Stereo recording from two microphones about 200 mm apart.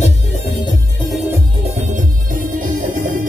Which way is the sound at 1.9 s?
40° right (ahead or behind).